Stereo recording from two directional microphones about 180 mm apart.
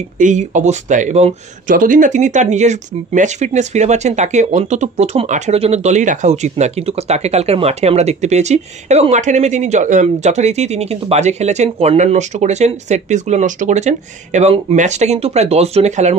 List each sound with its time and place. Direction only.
0.2 s speech: 45° right (ahead or behind)